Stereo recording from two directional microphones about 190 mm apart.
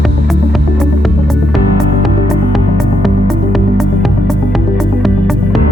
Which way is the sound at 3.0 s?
Centre (ahead or behind).